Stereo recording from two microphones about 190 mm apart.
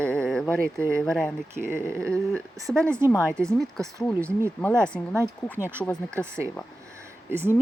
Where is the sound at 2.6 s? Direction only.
15° right (ahead or behind).